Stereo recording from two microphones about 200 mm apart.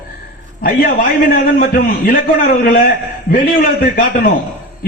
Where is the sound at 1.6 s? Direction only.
45° left (ahead or behind).